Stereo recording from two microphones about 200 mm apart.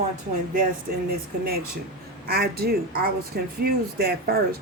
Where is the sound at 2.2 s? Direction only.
50° right (ahead or behind).